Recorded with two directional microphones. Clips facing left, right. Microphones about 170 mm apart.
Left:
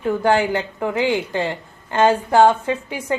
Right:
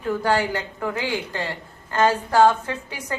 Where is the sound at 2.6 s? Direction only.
10° left (ahead or behind).